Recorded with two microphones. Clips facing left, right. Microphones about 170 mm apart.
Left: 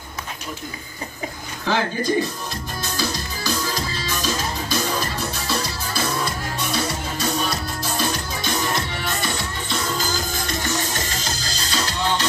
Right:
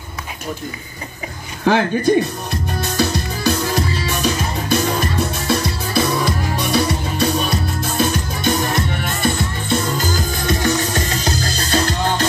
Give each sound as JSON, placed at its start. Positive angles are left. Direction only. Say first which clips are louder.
{"t": 1.7, "sound": "speech", "louder": "right 7 dB", "side_deg": -60}
{"t": 2.8, "sound": "music", "louder": "right 7 dB", "side_deg": -60}